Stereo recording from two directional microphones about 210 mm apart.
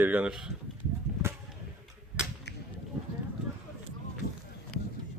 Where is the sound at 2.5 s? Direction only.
55° left (ahead or behind).